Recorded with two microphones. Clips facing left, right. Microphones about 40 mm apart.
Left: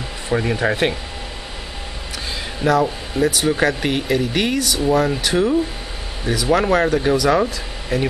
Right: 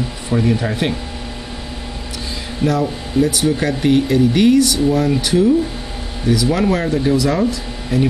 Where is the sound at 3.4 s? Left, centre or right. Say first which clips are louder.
Right 2 dB; centre.